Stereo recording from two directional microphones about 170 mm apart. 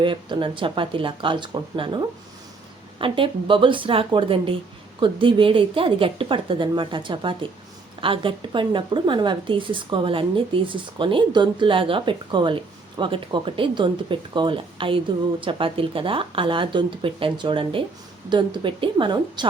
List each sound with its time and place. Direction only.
0.0 s a woman's voice: 30° right (ahead or behind)